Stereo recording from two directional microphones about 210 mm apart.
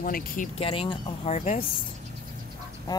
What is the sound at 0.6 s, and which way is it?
Speech, 25° left (ahead or behind).